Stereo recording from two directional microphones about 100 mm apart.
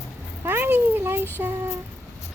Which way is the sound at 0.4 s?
20° right (ahead or behind).